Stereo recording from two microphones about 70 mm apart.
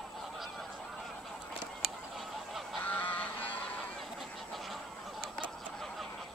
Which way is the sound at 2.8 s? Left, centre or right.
Left.